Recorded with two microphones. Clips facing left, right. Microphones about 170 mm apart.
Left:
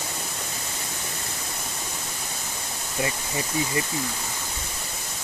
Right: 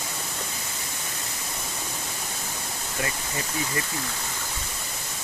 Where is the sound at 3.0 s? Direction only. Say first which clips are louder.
Left 3 dB; 20° left (ahead or behind).